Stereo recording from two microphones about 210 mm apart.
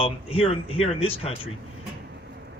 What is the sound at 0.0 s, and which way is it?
Speech, 25° left (ahead or behind).